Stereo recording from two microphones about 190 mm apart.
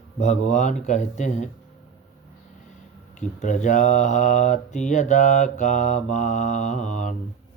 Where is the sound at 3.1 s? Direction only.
40° left (ahead or behind).